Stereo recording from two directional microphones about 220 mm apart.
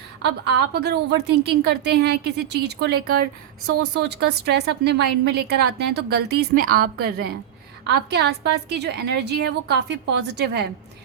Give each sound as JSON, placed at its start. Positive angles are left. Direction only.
{"t": 0.2, "sound": "a woman's voice", "side_deg": -50}
{"t": 3.8, "sound": "a woman's voice", "side_deg": -90}
{"t": 4.0, "sound": "a woman's voice", "side_deg": -50}